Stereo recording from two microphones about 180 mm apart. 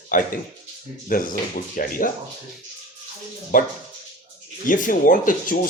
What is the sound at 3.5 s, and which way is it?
Speech, 50° left (ahead or behind).